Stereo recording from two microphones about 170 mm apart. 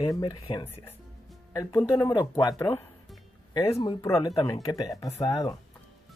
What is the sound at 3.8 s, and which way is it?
Speech, 20° left (ahead or behind).